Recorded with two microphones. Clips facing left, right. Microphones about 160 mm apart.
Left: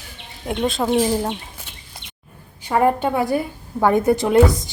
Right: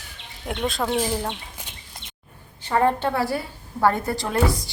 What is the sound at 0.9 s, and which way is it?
Speech, 20° left (ahead or behind).